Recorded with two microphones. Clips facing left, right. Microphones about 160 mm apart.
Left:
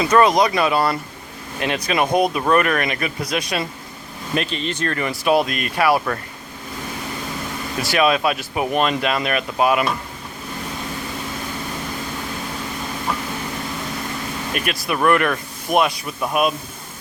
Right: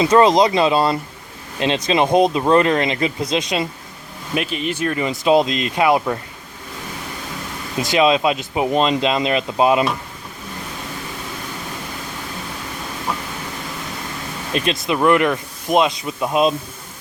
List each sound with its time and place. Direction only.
0.0 s speech: 25° right (ahead or behind)
4.4 s speech: 10° right (ahead or behind)
7.8 s speech: 20° right (ahead or behind)
14.5 s speech: 25° right (ahead or behind)